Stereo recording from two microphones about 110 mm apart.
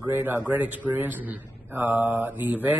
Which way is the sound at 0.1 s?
20° right (ahead or behind).